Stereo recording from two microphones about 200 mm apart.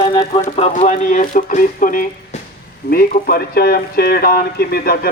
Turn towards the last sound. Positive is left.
turn(degrees=50)  # may be behind; listen again after turning